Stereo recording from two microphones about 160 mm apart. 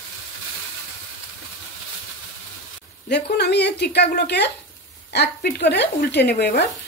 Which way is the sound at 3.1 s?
90° left.